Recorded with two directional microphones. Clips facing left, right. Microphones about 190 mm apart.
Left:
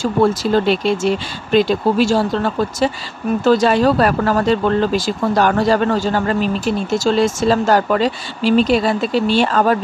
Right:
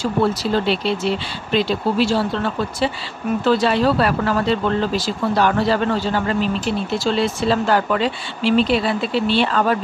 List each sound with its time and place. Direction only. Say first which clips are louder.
0.0 s speech: left 4 dB; 50° left (ahead or behind)